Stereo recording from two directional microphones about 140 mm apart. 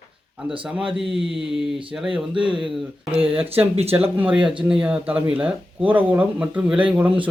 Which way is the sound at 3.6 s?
45° right (ahead or behind).